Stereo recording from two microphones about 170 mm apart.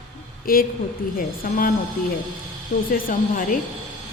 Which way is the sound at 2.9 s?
55° left (ahead or behind).